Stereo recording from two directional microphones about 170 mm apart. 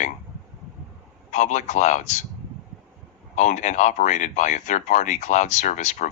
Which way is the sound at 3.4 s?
45° left (ahead or behind).